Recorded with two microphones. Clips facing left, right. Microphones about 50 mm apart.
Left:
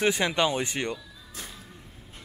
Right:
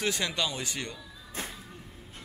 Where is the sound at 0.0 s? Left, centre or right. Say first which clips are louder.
Left 6 dB; left.